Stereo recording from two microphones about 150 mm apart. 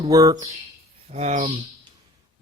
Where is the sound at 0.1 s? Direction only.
25° right (ahead or behind).